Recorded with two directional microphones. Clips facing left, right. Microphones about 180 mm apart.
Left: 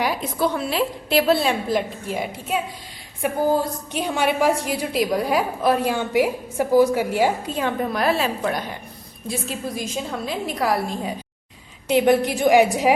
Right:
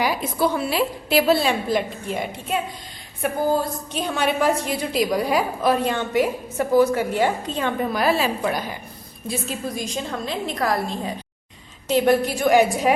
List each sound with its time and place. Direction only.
0.0 s a woman's voice: 5° right (ahead or behind)
3.2 s a woman's voice: 15° left (ahead or behind)